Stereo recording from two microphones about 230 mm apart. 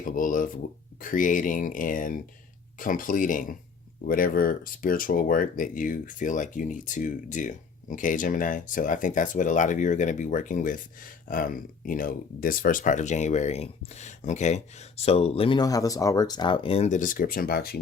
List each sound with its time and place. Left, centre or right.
0.0 s speech: left